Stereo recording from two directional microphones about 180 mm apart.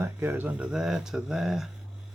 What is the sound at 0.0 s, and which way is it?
Speech, 10° right (ahead or behind).